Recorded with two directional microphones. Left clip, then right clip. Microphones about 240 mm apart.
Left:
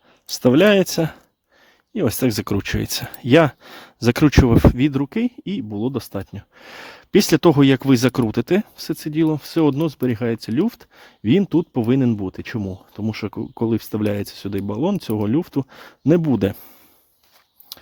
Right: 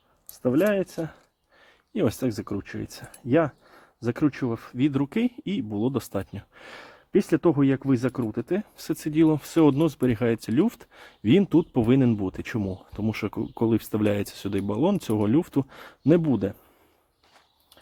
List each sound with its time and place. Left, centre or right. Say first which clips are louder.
0.3 s speech: left 9 dB; left
8.7 s speech: left 2 dB; left